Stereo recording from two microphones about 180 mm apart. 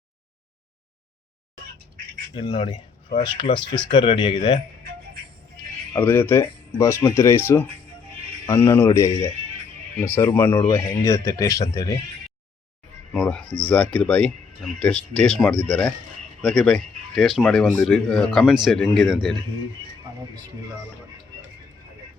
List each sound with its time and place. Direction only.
2.3 s speech: 30° left (ahead or behind)
5.9 s speech: 10° left (ahead or behind)
13.2 s speech: 5° left (ahead or behind)